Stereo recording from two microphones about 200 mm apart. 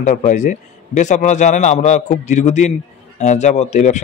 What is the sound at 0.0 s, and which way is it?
Speech, 40° left (ahead or behind).